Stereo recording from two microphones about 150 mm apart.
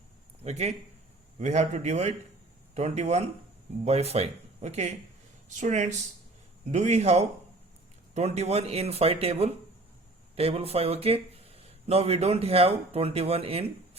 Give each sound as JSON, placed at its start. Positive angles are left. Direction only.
{"t": 0.4, "sound": "speech", "side_deg": -45}